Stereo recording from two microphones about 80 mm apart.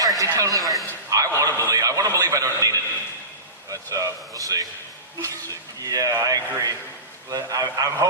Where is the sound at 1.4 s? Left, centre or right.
Right.